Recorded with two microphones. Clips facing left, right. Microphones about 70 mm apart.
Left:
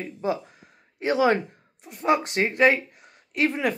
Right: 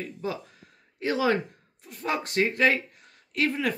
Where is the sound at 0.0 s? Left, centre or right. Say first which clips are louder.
Left 5 dB; left.